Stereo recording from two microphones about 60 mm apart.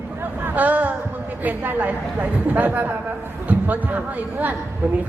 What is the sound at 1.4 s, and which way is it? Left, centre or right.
A woman's voice, right.